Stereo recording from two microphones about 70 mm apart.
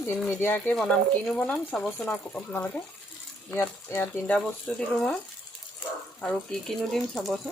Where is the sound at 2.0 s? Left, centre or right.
Left.